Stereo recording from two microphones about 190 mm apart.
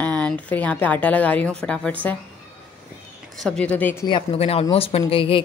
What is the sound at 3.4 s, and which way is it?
Speech, 5° left (ahead or behind).